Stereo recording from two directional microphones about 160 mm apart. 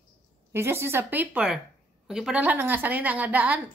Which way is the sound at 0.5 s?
15° right (ahead or behind).